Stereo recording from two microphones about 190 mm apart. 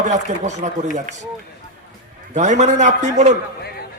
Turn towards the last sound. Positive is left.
turn(degrees=-40)  # may be behind; listen again after turning